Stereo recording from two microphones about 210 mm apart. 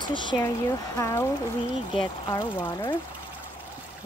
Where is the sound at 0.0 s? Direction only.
20° left (ahead or behind).